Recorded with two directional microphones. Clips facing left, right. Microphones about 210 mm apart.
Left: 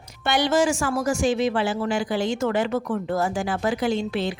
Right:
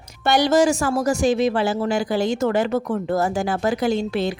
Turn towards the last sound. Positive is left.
turn(degrees=-40)  # may be behind; listen again after turning